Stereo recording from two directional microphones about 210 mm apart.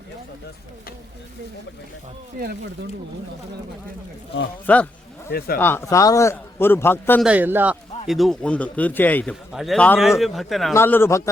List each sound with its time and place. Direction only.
2.4 s speech: 45° right (ahead or behind)
4.6 s a man's voice: 5° left (ahead or behind)
7.3 s speech: 10° right (ahead or behind)
10.8 s a man's voice: 10° left (ahead or behind)